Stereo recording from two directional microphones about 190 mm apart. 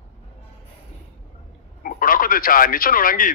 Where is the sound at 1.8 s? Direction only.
50° left (ahead or behind).